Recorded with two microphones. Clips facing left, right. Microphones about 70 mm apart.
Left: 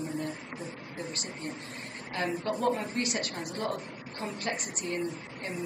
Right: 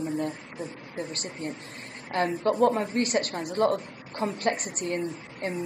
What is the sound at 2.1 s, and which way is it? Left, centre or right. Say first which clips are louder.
A woman's voice: right 6 dB; right.